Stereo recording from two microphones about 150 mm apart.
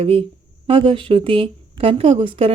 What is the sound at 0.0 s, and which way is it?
A woman's voice, 40° right (ahead or behind).